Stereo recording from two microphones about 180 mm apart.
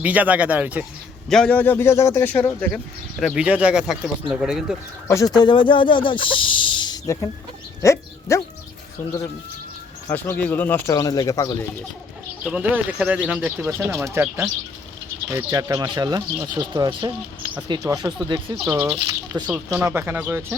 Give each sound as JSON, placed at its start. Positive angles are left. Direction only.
{"t": 0.0, "sound": "speech", "side_deg": -10}
{"t": 1.3, "sound": "speech", "side_deg": 5}
{"t": 5.0, "sound": "speech", "side_deg": 20}
{"t": 10.1, "sound": "speech", "side_deg": 10}
{"t": 12.5, "sound": "speech", "side_deg": -5}